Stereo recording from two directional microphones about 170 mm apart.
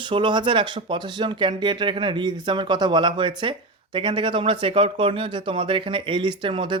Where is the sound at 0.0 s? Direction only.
25° right (ahead or behind).